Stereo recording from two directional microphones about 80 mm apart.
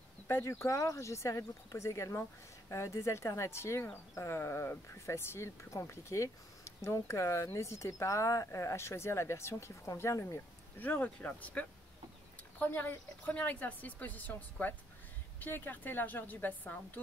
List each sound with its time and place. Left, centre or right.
0.3 s speech: left
10.8 s a woman's voice: left